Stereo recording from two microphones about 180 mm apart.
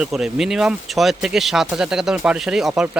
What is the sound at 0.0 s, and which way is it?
Speech, centre (ahead or behind).